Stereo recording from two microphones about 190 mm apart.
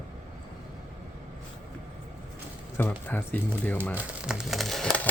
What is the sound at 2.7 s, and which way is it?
Speech, 10° left (ahead or behind).